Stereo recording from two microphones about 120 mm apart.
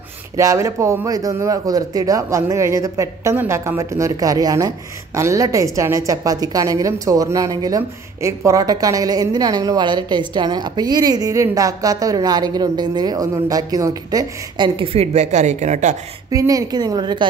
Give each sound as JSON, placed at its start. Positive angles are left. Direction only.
{"t": 0.4, "sound": "a man's voice", "side_deg": -25}
{"t": 14.8, "sound": "a woman's voice", "side_deg": -55}
{"t": 16.3, "sound": "a woman's voice", "side_deg": -30}